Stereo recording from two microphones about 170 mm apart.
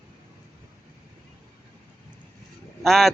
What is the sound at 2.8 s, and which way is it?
Speech, centre (ahead or behind).